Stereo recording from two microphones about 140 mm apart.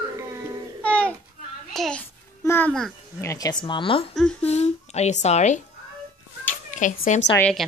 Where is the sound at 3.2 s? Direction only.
25° left (ahead or behind); by 4.1 s 40° left (ahead or behind).